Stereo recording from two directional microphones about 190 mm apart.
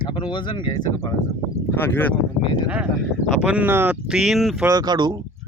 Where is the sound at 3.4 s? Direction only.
5° right (ahead or behind).